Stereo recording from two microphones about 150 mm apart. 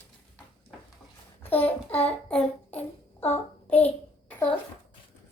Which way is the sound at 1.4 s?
10° left (ahead or behind).